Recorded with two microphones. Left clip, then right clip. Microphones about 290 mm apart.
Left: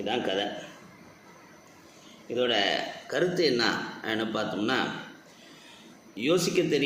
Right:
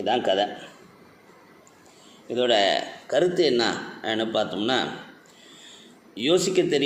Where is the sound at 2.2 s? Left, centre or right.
Right.